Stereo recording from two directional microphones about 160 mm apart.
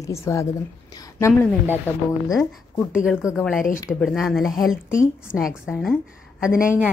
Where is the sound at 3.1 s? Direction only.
Centre (ahead or behind).